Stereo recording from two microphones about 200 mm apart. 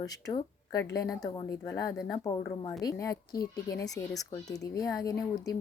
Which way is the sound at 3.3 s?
50° left (ahead or behind).